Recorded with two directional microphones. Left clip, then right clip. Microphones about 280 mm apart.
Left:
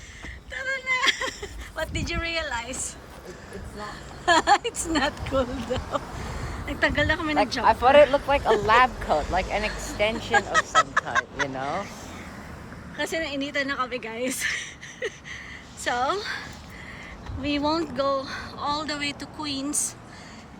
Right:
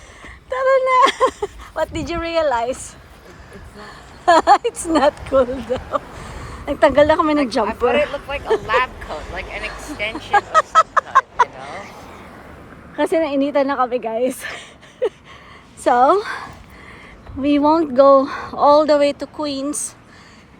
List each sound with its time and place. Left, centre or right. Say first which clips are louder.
0.5 s a sound: right 13 dB; centre
3.8 s speech: even; centre
7.7 s speech: left 2 dB; left
10.3 s speech: right 8 dB; centre
11.1 s a sound: right 11 dB; centre
13.0 s a woman's voice: right 11 dB; centre